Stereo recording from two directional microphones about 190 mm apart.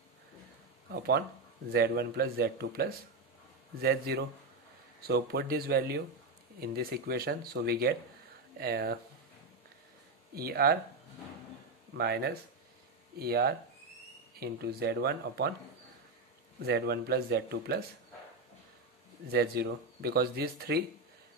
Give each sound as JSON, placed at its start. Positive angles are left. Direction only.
{"t": 0.9, "sound": "speech", "side_deg": -60}
{"t": 10.3, "sound": "speech", "side_deg": -55}
{"t": 12.0, "sound": "speech", "side_deg": -55}
{"t": 16.6, "sound": "speech", "side_deg": -60}
{"t": 19.3, "sound": "speech", "side_deg": -55}